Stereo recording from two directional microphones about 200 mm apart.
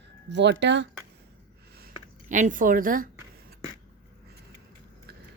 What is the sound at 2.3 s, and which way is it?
Speech, 40° right (ahead or behind).